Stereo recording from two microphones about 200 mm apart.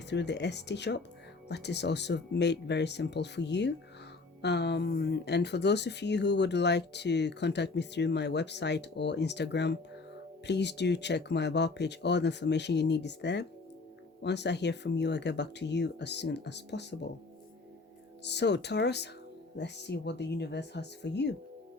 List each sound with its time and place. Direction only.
0.1 s speech: 60° left (ahead or behind)
18.2 s speech: 60° left (ahead or behind)